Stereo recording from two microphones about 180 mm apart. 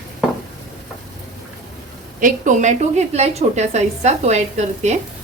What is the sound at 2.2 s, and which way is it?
A woman's voice, 45° right (ahead or behind).